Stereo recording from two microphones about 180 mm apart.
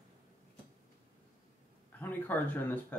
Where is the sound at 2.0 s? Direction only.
10° left (ahead or behind).